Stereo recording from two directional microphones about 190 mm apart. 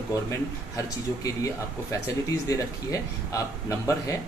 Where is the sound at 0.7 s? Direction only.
20° left (ahead or behind).